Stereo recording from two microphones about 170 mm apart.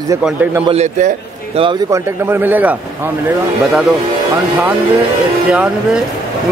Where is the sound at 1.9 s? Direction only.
15° right (ahead or behind).